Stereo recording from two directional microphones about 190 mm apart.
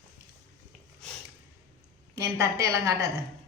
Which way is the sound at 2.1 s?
15° right (ahead or behind).